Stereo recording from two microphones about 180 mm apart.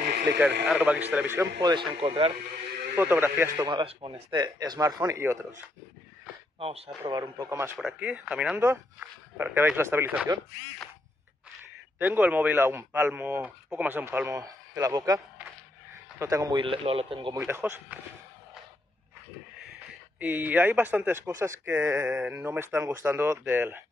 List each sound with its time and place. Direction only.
0.3 s speech: 20° right (ahead or behind)
0.7 s speech: 10° right (ahead or behind)
1.6 s speech: 25° right (ahead or behind)
3.0 s speech: 10° right (ahead or behind)
7.1 s speech: 20° right (ahead or behind)
12.0 s speech: 10° right (ahead or behind); by 17.4 s 30° right (ahead or behind)
17.4 s speech: 10° right (ahead or behind)
20.2 s speech: 10° right (ahead or behind)